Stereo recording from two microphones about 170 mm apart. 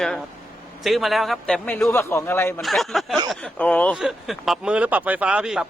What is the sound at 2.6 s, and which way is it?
Speech, centre (ahead or behind).